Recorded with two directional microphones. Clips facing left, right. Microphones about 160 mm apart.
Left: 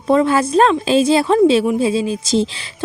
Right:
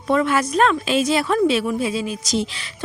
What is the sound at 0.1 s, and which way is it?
Speech, 30° left (ahead or behind).